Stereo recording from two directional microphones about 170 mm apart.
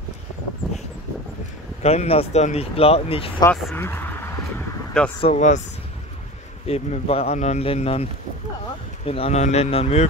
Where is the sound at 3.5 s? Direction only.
15° left (ahead or behind).